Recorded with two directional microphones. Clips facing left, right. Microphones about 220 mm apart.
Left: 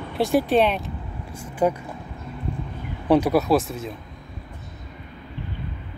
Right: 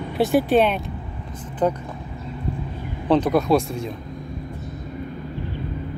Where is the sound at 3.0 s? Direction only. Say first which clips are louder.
Even; 10° left (ahead or behind).